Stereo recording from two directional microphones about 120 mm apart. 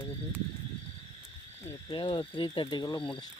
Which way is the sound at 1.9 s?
40° left (ahead or behind).